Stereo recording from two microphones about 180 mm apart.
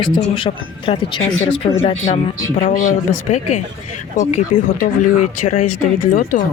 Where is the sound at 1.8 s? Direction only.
40° left (ahead or behind).